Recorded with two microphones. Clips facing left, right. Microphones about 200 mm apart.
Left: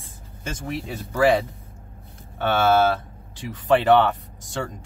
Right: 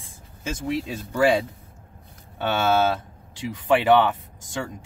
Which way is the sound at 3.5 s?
10° right (ahead or behind).